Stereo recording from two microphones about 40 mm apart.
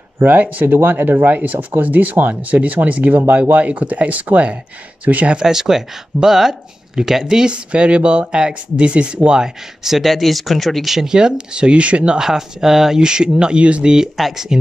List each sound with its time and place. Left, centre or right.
0.2 s speech: right
5.4 s speech: centre
7.5 s speech: right
9.4 s speech: centre
11.1 s speech: centre
12.2 s speech: centre
13.0 s speech: right
14.1 s speech: centre